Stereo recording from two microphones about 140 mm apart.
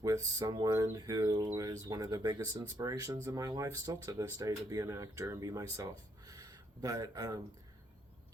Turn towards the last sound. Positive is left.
turn(degrees=-25)  # may be behind; listen again after turning